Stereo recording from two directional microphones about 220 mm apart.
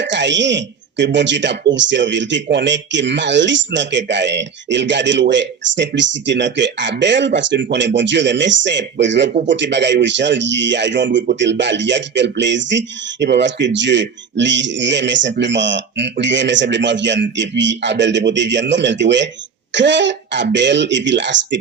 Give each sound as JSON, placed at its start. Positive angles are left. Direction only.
{"t": 0.0, "sound": "speech", "side_deg": -55}